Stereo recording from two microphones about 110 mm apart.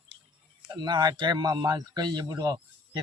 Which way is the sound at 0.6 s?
40° right (ahead or behind).